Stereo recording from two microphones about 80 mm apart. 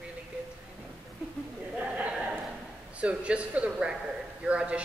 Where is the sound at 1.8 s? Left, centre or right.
Centre.